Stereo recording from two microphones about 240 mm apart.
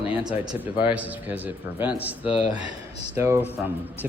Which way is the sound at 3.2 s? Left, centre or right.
Centre.